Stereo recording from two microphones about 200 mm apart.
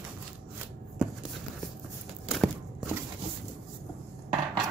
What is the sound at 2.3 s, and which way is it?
Walk, 5° right (ahead or behind).